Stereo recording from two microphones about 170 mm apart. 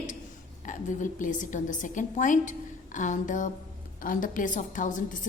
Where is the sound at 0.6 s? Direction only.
50° left (ahead or behind).